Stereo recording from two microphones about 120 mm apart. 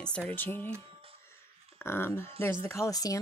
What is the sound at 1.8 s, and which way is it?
Speech, 20° left (ahead or behind).